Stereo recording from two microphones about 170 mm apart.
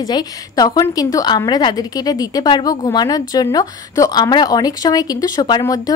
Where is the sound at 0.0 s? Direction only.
25° left (ahead or behind).